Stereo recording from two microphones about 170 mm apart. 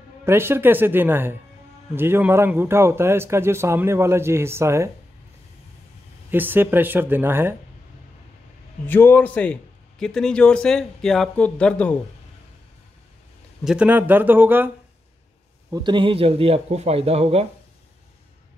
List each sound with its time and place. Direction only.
0.2 s speech: 15° right (ahead or behind)
6.3 s speech: 10° right (ahead or behind)
8.8 s speech: 10° left (ahead or behind)
13.7 s speech: 10° right (ahead or behind)
15.7 s speech: 25° right (ahead or behind)